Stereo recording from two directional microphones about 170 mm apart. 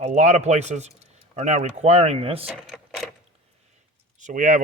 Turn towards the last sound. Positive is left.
turn(degrees=-50)  # may be behind; listen again after turning